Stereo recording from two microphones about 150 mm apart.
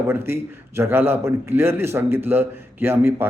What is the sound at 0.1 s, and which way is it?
A man's voice, 15° right (ahead or behind).